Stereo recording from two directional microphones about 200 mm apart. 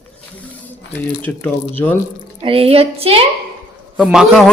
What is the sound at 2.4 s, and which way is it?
Speech, 30° right (ahead or behind).